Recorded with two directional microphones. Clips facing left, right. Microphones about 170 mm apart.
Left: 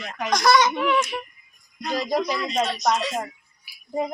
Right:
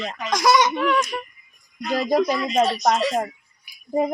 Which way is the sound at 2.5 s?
40° right (ahead or behind).